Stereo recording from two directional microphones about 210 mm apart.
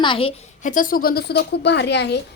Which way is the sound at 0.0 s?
25° left (ahead or behind).